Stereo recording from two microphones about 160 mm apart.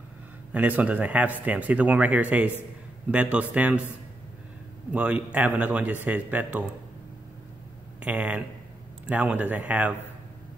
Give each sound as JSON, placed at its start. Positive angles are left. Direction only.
{"t": 0.5, "sound": "speech", "side_deg": -10}
{"t": 4.9, "sound": "speech", "side_deg": -10}
{"t": 8.0, "sound": "speech", "side_deg": -10}